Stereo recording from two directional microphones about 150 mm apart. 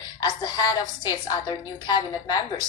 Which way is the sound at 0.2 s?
25° left (ahead or behind).